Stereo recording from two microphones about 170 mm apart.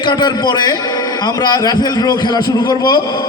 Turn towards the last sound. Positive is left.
turn(degrees=25)  # may be behind; listen again after turning